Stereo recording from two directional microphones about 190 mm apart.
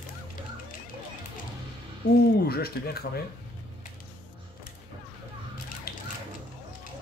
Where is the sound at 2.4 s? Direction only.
55° left (ahead or behind).